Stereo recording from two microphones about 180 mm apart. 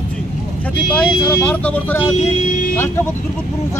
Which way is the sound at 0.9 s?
5° left (ahead or behind).